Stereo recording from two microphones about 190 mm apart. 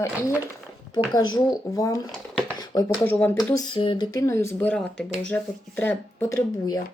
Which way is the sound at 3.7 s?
25° left (ahead or behind).